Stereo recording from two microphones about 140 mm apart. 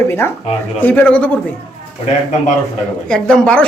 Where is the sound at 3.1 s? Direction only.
5° left (ahead or behind).